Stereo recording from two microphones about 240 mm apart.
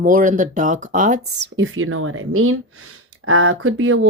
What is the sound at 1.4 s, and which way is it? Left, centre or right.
Speech, right.